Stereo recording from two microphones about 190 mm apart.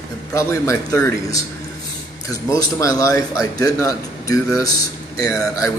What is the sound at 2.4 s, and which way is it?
Speech, 20° left (ahead or behind).